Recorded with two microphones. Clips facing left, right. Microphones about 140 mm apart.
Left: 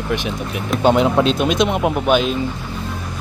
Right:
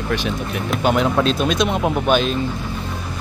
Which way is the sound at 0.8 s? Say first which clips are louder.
Left 3 dB; 20° left (ahead or behind).